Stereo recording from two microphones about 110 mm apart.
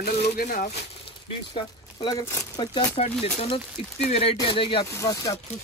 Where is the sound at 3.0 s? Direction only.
70° left (ahead or behind).